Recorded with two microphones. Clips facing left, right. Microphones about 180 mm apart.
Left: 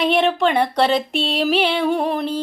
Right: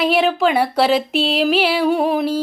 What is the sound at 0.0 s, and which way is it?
Speech, centre (ahead or behind).